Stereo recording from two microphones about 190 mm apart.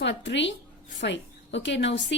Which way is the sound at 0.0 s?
70° left (ahead or behind).